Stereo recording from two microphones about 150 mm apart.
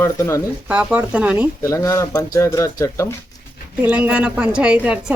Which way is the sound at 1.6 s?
20° left (ahead or behind).